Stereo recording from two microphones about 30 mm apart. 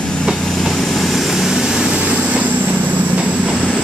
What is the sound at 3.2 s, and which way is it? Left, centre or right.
Train, right.